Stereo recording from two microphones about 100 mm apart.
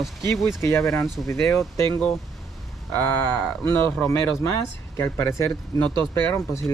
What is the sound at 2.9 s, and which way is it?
Speech, 20° left (ahead or behind).